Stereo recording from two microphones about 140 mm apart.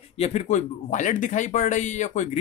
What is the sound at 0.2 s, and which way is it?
Speech, 55° left (ahead or behind).